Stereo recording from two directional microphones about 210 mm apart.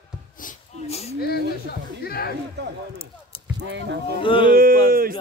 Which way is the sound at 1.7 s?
45° left (ahead or behind).